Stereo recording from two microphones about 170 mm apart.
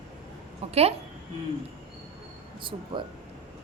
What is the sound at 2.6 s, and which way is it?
Speech, 30° right (ahead or behind).